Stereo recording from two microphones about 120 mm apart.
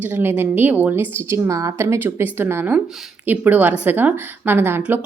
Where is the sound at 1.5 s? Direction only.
25° right (ahead or behind).